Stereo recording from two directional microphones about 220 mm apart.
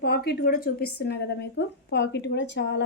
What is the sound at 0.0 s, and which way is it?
A woman's voice, 45° left (ahead or behind).